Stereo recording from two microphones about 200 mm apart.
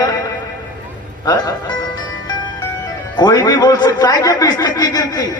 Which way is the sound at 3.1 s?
20° left (ahead or behind).